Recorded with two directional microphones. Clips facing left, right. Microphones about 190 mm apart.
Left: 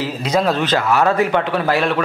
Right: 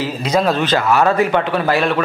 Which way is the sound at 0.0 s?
10° right (ahead or behind).